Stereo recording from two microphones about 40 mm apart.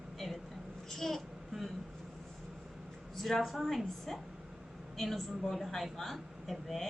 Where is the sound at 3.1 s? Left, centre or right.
Centre.